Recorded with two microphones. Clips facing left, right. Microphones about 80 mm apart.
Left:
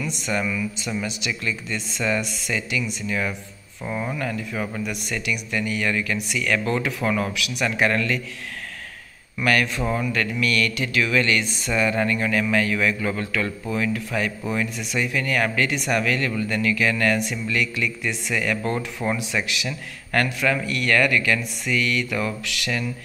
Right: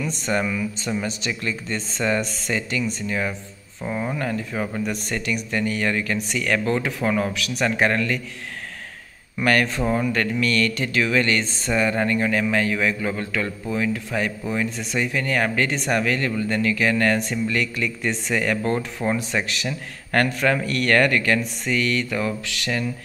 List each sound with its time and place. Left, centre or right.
0.0 s a man's voice: right
3.8 s speech: centre
4.2 s a man's voice: right
6.7 s speech: right
9.4 s a man's voice: right